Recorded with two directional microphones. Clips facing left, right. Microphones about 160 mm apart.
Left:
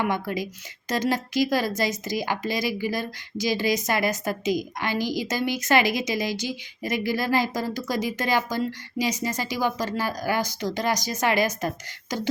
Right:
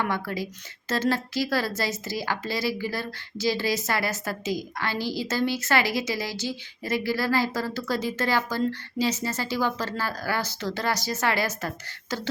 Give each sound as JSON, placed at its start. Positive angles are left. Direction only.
{"t": 0.0, "sound": "a woman's voice", "side_deg": 15}